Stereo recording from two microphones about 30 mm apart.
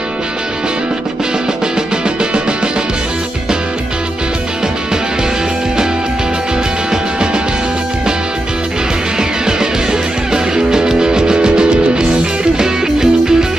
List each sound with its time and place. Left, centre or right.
10.3 s music: right
12.5 s music: centre